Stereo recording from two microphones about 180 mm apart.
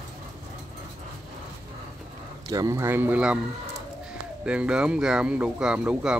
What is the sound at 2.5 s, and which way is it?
Speech, 20° right (ahead or behind).